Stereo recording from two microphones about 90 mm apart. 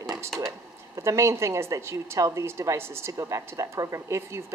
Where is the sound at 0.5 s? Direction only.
30° right (ahead or behind).